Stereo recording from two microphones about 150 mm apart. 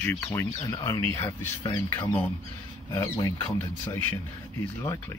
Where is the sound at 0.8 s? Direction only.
20° left (ahead or behind).